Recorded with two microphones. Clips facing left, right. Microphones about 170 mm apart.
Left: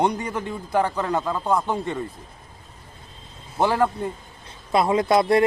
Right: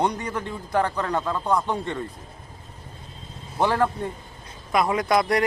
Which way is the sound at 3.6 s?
10° left (ahead or behind).